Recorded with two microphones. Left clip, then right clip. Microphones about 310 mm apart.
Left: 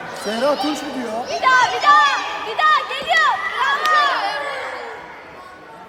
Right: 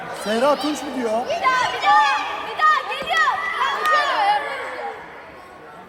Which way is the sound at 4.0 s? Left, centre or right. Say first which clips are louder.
Left 1 dB; right.